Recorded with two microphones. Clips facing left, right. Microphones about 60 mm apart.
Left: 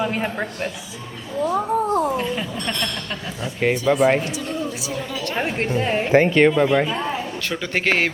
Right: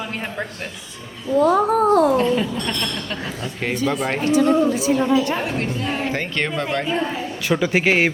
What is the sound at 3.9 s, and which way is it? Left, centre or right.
Speech, centre.